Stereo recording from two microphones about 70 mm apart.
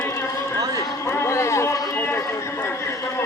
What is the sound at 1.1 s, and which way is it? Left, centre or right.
Speech, left.